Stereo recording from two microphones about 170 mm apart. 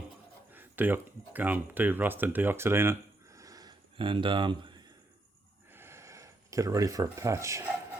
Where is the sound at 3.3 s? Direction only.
20° right (ahead or behind).